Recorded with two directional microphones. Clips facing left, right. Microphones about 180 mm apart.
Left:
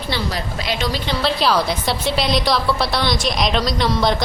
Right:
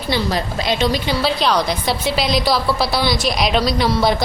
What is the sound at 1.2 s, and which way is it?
A woman's voice, centre (ahead or behind).